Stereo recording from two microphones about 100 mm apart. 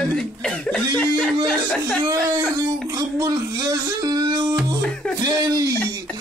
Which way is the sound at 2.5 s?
35° right (ahead or behind).